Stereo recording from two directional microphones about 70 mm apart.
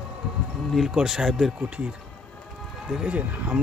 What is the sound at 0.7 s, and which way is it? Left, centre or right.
Speech, centre.